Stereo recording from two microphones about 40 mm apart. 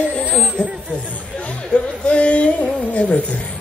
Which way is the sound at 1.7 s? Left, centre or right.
Left.